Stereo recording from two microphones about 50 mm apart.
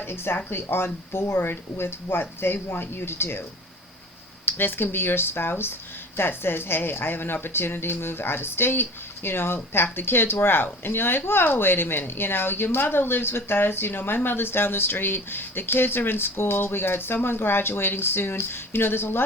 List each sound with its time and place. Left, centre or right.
0.0 s speech: left
4.4 s speech: left